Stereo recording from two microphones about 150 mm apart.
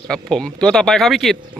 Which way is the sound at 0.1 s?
5° left (ahead or behind).